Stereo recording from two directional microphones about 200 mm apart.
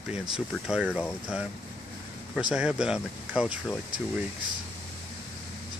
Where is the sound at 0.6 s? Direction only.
5° right (ahead or behind).